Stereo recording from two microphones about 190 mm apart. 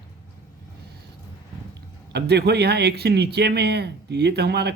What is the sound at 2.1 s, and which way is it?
Speech, 60° right (ahead or behind).